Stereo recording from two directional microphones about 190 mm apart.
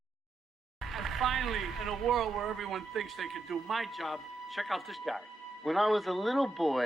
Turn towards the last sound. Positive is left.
turn(degrees=0)  # may be behind; listen again after turning